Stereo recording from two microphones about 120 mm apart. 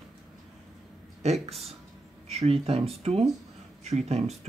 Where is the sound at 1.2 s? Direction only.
60° right (ahead or behind).